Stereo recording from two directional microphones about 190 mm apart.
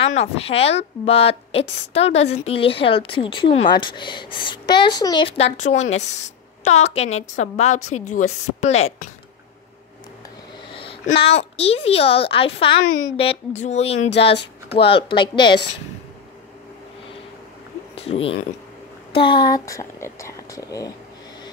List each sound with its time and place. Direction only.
0.0 s a woman's voice: 35° left (ahead or behind)
10.7 s a sound: 25° left (ahead or behind)
11.1 s a woman's voice: 30° left (ahead or behind)
17.9 s speech: 30° left (ahead or behind)